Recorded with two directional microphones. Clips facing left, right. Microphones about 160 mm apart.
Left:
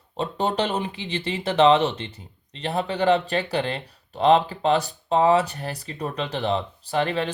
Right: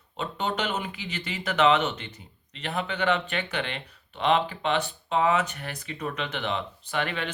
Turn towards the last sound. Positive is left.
turn(degrees=35)  # may be behind; listen again after turning